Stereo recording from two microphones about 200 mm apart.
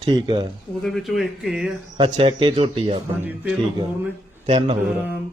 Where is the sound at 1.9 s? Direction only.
25° right (ahead or behind).